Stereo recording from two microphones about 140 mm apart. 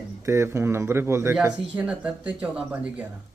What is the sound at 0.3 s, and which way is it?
Speech, 20° right (ahead or behind).